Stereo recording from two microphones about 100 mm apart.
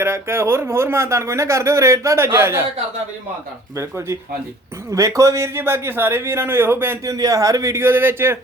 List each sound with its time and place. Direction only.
0.0 s a man's voice: 25° right (ahead or behind)
3.8 s a man's voice: 25° right (ahead or behind)